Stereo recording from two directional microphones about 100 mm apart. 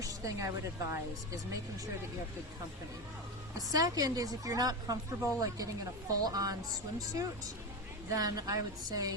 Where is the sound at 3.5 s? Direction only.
35° right (ahead or behind).